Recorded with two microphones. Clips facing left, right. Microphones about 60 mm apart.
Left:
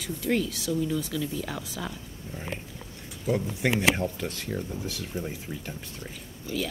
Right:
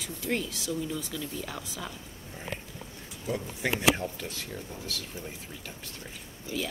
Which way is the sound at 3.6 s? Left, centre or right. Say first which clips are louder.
Left 1 dB; centre.